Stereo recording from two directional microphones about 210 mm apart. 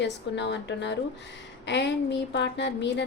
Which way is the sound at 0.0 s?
55° left (ahead or behind).